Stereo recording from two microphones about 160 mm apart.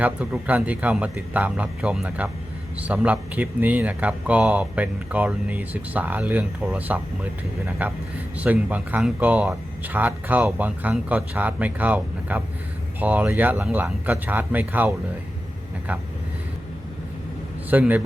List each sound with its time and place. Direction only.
0.0 s speech: 10° right (ahead or behind)
17.7 s speech: 10° right (ahead or behind)